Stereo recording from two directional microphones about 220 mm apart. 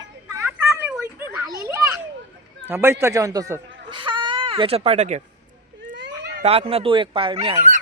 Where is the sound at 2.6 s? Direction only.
10° right (ahead or behind); by 5.2 s 30° right (ahead or behind).